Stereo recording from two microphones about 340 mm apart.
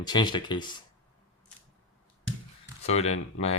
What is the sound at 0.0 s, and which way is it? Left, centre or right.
Speech, centre.